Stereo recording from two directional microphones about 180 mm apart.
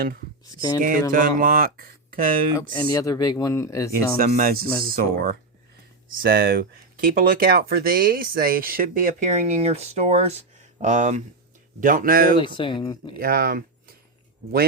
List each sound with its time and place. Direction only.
0.4 s speech: 25° left (ahead or behind)
0.8 s speech: 50° right (ahead or behind)
2.6 s speech: 20° left (ahead or behind)
4.2 s speech: 50° right (ahead or behind)
12.4 s speech: 25° left (ahead or behind)
13.1 s speech: 55° right (ahead or behind)